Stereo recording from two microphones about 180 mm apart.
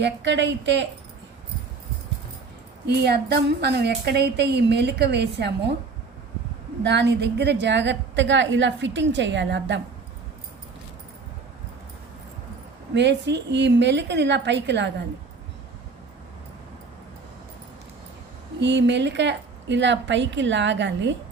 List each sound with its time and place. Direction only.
0.0 s speech: 80° right
2.8 s speech: 65° right (ahead or behind)
6.8 s a woman's voice: 70° right (ahead or behind)
12.9 s speech: 75° right (ahead or behind)
18.6 s a woman's voice: 80° right